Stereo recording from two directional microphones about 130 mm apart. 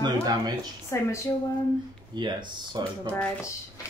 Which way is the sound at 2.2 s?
35° right (ahead or behind).